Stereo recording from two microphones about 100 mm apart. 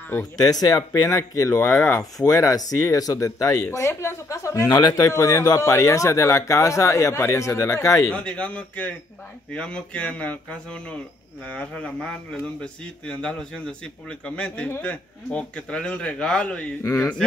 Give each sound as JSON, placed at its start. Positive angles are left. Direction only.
{"t": 0.4, "sound": "speech", "side_deg": 40}
{"t": 8.1, "sound": "speech", "side_deg": 10}